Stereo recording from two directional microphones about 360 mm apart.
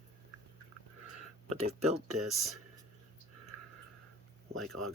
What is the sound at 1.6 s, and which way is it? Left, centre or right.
Speech, centre.